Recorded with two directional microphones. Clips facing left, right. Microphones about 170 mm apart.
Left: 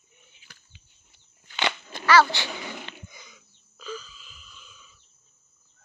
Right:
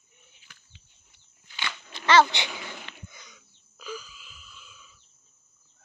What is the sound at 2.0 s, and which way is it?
Speech, 20° right (ahead or behind).